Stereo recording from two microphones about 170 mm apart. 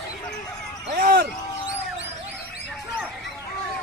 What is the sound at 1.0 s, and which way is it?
Basketball bounce, 55° right (ahead or behind).